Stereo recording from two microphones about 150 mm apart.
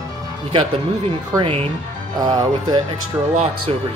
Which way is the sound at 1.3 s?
35° right (ahead or behind).